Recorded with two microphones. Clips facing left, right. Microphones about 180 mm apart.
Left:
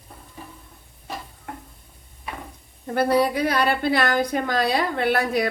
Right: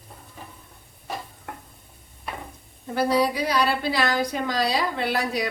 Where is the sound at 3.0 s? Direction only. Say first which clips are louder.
Left 2 dB; 55° left (ahead or behind).